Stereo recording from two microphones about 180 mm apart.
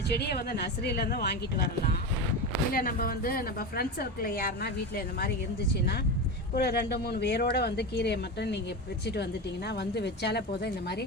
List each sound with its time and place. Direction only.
0.2 s a woman's voice: 65° left (ahead or behind)
6.5 s a woman's voice: 60° left (ahead or behind)
9.6 s speech: 70° left (ahead or behind)